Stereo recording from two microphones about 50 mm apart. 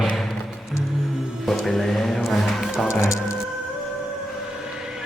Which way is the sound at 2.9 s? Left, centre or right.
Left.